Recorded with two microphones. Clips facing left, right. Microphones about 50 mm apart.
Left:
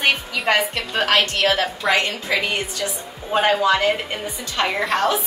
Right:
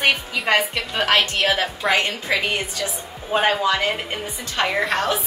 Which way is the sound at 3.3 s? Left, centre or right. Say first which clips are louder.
Left 1 dB; centre.